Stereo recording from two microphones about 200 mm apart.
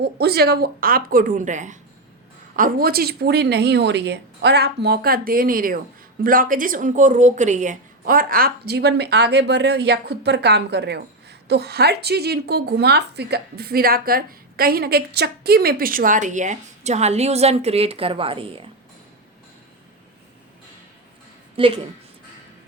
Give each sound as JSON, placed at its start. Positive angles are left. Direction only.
{"t": 0.0, "sound": "a woman's voice", "side_deg": -55}
{"t": 21.5, "sound": "a woman's voice", "side_deg": -25}